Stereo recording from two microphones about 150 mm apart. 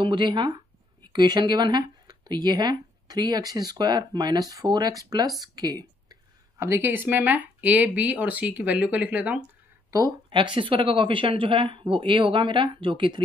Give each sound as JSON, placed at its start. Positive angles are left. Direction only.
{"t": 0.0, "sound": "speech", "side_deg": -30}
{"t": 9.8, "sound": "speech", "side_deg": -25}